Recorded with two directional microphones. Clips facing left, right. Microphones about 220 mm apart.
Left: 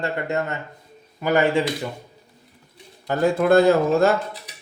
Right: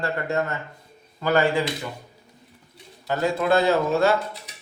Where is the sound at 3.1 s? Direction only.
50° left (ahead or behind).